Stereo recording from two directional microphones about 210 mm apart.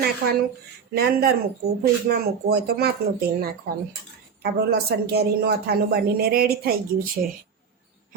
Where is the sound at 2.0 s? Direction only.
45° right (ahead or behind).